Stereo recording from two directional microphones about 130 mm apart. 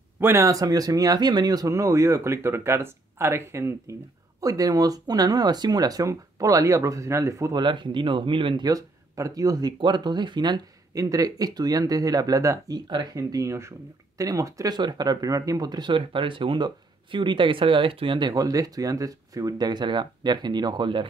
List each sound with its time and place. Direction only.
0.2 s speech: 20° right (ahead or behind)
7.6 s speech: 40° right (ahead or behind)